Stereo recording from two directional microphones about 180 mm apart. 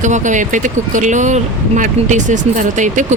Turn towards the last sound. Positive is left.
turn(degrees=-45)  # may be behind; listen again after turning